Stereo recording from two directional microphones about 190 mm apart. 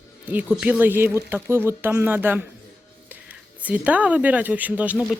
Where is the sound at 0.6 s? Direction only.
10° right (ahead or behind).